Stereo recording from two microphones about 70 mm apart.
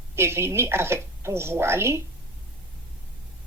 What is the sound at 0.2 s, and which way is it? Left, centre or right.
A woman's voice, right.